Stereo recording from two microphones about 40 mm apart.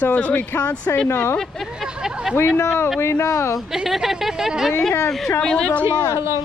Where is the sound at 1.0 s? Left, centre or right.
Left.